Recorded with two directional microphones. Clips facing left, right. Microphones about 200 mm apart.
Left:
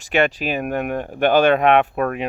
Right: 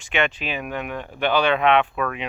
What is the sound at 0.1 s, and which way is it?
Speech, 40° left (ahead or behind).